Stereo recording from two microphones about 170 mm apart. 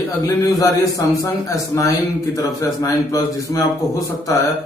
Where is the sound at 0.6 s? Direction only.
20° left (ahead or behind).